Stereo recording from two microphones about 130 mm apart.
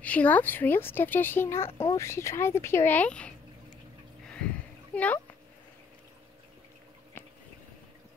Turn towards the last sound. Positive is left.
turn(degrees=15)  # may be behind; listen again after turning